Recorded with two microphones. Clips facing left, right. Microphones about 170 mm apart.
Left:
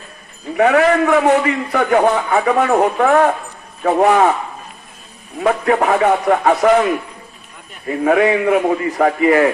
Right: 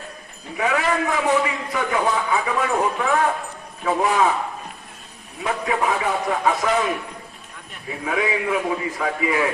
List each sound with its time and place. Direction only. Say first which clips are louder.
0.5 s a man's voice: left 9 dB; 65° left (ahead or behind)
5.4 s a man's voice: left 8 dB; 70° left (ahead or behind)
8.0 s a man's voice: left 10 dB; 65° left (ahead or behind)